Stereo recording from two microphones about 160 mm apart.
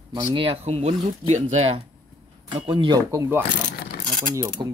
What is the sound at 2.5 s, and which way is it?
Speech, 30° right (ahead or behind).